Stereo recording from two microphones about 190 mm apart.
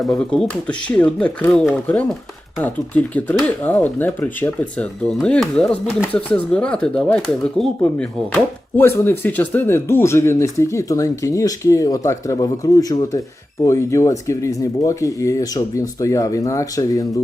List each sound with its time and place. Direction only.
0.0 s speech: 5° left (ahead or behind)